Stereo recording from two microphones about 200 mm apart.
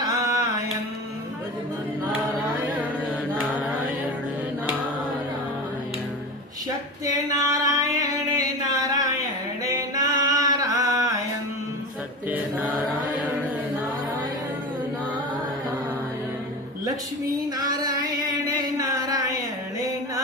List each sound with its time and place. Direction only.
0.0 s mantra: 15° right (ahead or behind)
7.0 s a sound: 20° right (ahead or behind)
9.6 s singing: 20° right (ahead or behind)
17.6 s music: 20° right (ahead or behind)